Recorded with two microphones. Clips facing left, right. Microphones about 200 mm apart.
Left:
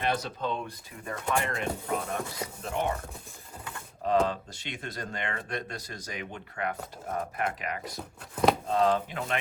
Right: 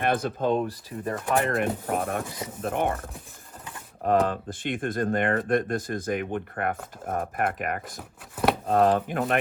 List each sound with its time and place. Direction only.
0.0 s speech: 55° right (ahead or behind)
1.5 s speech: 55° right (ahead or behind)
4.0 s speech: 55° right (ahead or behind)